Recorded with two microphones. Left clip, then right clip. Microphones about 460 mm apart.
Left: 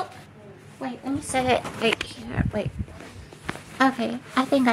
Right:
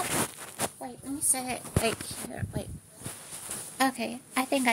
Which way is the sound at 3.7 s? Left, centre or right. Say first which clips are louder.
Left 6 dB; right.